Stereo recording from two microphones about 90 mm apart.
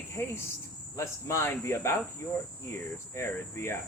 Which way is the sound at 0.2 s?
30° left (ahead or behind).